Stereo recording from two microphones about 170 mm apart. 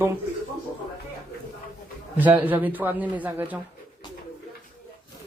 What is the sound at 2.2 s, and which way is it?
Speech, 10° right (ahead or behind).